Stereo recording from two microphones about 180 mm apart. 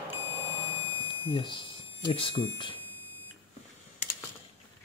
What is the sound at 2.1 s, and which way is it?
Speech, 30° left (ahead or behind).